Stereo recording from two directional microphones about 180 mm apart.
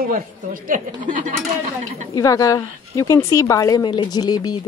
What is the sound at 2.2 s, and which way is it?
A woman's voice, 20° left (ahead or behind).